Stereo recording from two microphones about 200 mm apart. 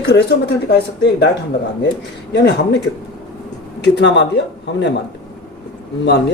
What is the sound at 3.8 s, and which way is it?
Speech, 60° left (ahead or behind).